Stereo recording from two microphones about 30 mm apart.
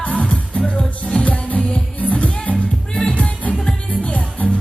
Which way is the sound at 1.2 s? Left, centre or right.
Left.